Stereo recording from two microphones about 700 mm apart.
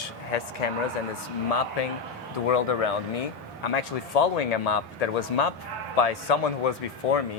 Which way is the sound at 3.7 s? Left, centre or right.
Left.